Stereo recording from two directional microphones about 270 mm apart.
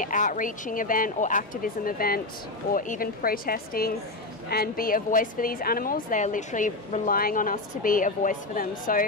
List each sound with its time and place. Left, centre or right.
0.0 s a woman's voice: left